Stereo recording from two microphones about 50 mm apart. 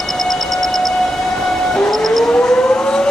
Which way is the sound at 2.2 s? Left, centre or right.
Centre.